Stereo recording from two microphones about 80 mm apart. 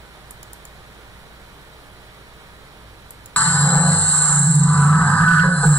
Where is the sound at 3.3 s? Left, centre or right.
Centre.